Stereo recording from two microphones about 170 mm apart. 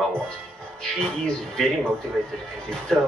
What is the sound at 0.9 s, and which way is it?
Speech, 5° left (ahead or behind).